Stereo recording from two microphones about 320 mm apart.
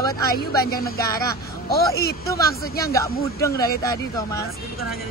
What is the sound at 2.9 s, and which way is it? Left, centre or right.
Speech, centre.